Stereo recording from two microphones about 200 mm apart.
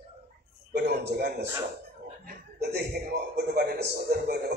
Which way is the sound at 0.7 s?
55° right (ahead or behind).